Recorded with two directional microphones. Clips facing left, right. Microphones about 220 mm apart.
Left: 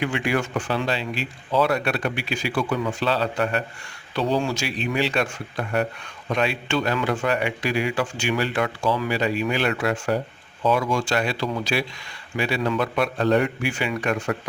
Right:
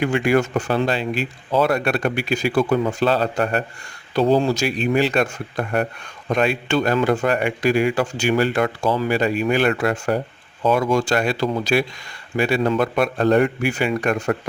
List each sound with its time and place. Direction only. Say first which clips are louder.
0.0 s speech: right 6 dB; 45° right (ahead or behind)